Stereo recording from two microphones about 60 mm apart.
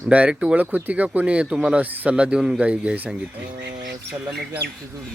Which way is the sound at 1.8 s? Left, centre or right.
Right.